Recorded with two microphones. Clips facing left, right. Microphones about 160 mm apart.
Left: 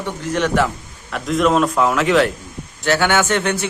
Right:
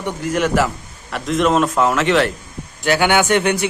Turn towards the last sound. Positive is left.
turn(degrees=-15)  # may be behind; listen again after turning